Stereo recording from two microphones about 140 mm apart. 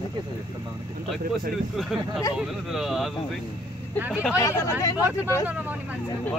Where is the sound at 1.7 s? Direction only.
Centre (ahead or behind).